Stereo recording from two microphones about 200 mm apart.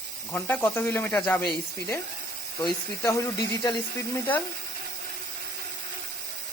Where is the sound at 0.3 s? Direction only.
10° left (ahead or behind).